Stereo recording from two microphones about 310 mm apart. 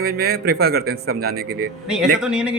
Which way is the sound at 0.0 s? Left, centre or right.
Right.